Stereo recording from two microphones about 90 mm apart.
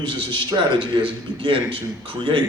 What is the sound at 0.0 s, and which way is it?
A man's voice, 65° right (ahead or behind).